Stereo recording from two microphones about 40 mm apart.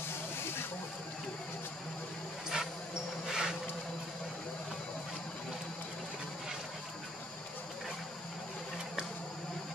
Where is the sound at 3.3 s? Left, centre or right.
Centre.